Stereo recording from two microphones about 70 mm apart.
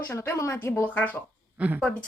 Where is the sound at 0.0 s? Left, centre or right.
Left.